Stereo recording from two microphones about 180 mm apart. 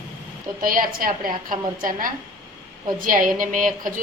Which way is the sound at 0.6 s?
50° right (ahead or behind).